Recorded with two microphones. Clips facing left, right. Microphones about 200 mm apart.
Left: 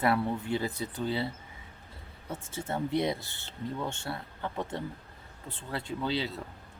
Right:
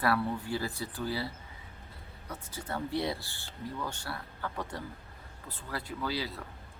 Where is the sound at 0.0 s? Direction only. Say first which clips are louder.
Left 2 dB; 20° left (ahead or behind).